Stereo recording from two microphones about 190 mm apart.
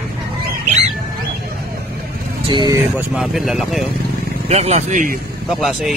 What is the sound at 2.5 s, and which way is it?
Speech, 25° right (ahead or behind).